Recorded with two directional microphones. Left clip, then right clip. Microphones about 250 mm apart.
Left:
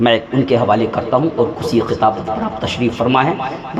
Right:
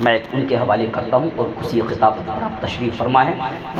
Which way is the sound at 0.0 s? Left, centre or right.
Left.